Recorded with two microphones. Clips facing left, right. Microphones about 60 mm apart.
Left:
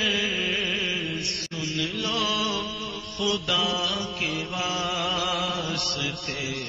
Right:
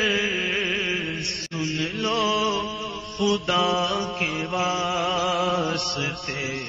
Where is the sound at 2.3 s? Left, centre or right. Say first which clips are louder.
Right 4 dB; right.